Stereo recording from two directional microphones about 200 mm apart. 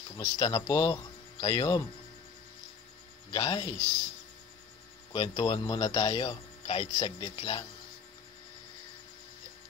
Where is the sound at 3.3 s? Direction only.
25° left (ahead or behind).